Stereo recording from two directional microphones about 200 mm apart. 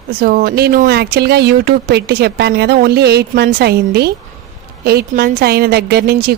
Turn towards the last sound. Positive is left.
turn(degrees=-50)  # may be behind; listen again after turning